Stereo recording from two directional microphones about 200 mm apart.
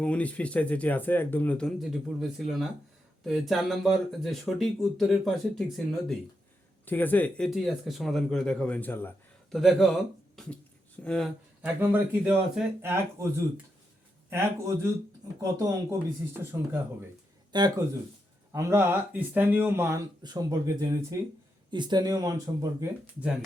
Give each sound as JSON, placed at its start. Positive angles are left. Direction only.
{"t": 0.0, "sound": "speech", "side_deg": 5}
{"t": 9.6, "sound": "speech", "side_deg": 0}
{"t": 11.6, "sound": "speech", "side_deg": -10}
{"t": 14.3, "sound": "speech", "side_deg": -15}